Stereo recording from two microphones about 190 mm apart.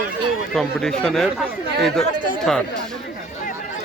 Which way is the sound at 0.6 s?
Centre (ahead or behind).